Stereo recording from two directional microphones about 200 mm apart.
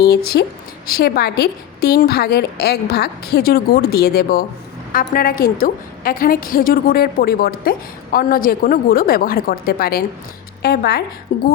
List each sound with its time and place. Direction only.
0.0 s a woman's voice: 50° left (ahead or behind)
11.3 s a woman's voice: 40° left (ahead or behind)